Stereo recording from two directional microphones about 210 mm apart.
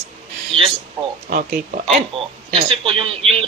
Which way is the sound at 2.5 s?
25° right (ahead or behind).